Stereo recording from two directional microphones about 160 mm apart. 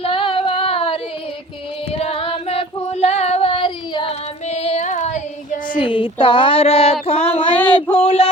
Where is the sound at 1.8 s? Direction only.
35° left (ahead or behind).